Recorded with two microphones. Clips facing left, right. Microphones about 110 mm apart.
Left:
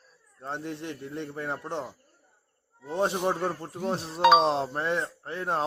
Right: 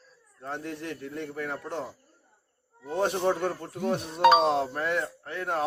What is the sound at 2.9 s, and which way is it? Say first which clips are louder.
A man's voice: right 1 dB; 25° left (ahead or behind).